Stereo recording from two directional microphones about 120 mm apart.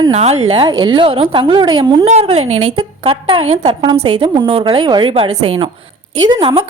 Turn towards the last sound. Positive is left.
turn(degrees=-45)  # may be behind; listen again after turning